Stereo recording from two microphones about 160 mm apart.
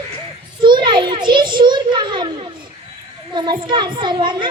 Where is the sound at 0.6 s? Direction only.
30° right (ahead or behind).